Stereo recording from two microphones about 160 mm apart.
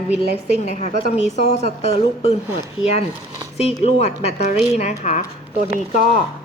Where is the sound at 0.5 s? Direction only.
45° left (ahead or behind).